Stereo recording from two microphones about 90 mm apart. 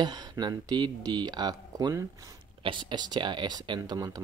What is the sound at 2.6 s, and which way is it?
Speech, 60° right (ahead or behind).